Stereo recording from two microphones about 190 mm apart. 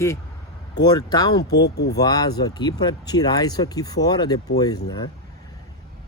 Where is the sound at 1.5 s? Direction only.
60° left (ahead or behind).